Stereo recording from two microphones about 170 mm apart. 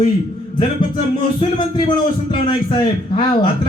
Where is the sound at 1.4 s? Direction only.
30° left (ahead or behind).